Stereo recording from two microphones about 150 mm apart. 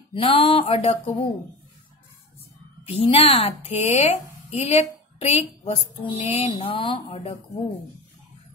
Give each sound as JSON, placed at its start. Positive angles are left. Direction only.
{"t": 0.1, "sound": "a woman's voice", "side_deg": 35}
{"t": 2.9, "sound": "a woman's voice", "side_deg": 40}